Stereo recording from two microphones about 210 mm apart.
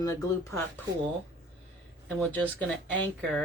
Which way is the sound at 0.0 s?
15° left (ahead or behind).